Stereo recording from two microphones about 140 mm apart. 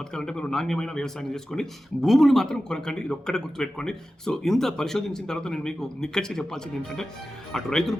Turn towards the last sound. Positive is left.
turn(degrees=5)  # may be behind; listen again after turning